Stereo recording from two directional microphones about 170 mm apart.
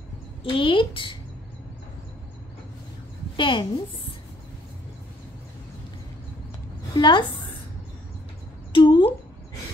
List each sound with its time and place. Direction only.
0.4 s a child's voice: 30° left (ahead or behind)
3.3 s a child's voice: 30° left (ahead or behind)
6.9 s a child's voice: 25° left (ahead or behind)
8.7 s a sound: 25° left (ahead or behind)